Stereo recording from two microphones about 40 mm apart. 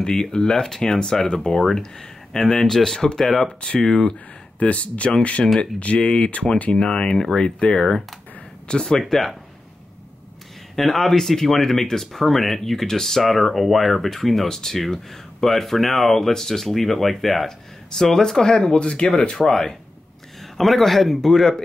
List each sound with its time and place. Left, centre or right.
0.0 s speech: centre
4.6 s speech: left
6.7 s speech: centre
9.1 s speech: centre
10.8 s speech: centre